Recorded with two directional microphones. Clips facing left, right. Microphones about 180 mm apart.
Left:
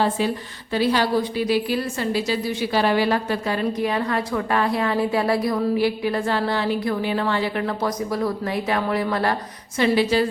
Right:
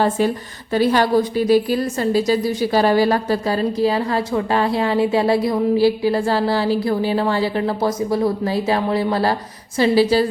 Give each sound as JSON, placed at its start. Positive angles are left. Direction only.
{"t": 0.7, "sound": "a woman's voice", "side_deg": -45}